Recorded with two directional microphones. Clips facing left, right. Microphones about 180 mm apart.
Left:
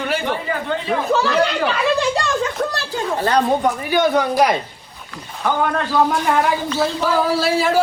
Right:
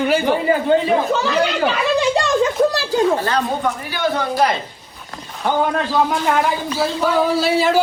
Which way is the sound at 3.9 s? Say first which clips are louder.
Left 4 dB; 15° left (ahead or behind).